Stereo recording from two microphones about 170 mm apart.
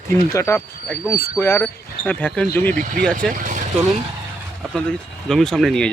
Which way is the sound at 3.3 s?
50° right (ahead or behind).